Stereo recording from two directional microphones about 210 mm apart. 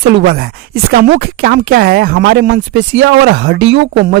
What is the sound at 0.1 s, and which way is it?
A woman's voice, 50° right (ahead or behind).